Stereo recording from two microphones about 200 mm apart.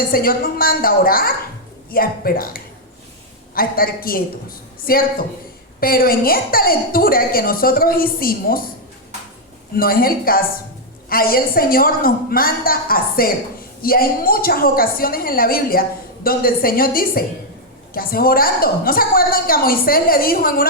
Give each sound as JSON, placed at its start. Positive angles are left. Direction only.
{"t": 0.1, "sound": "a woman's voice", "side_deg": 45}
{"t": 9.7, "sound": "a woman's voice", "side_deg": 45}